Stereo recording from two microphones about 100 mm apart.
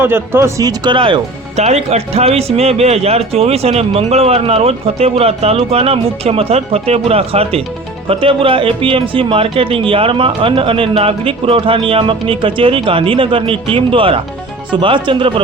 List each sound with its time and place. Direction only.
0.0 s speech: 25° right (ahead or behind)
0.6 s speech: 55° right (ahead or behind); by 7.6 s 75° right (ahead or behind)
8.0 s speech: 65° right (ahead or behind)